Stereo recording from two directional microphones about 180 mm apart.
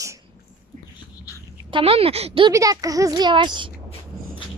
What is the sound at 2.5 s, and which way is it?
Speech, 20° right (ahead or behind).